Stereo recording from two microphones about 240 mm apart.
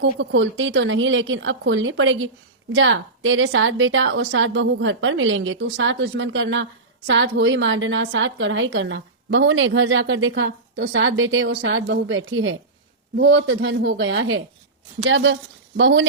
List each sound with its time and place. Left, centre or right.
0.0 s a woman's voice: right